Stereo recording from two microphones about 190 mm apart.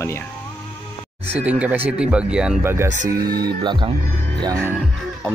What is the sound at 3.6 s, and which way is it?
Speech, 25° right (ahead or behind).